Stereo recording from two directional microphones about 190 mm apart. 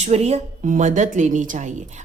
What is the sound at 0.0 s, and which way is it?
Speech, 35° right (ahead or behind).